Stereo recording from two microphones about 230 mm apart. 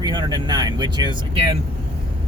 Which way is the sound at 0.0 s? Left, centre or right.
Centre.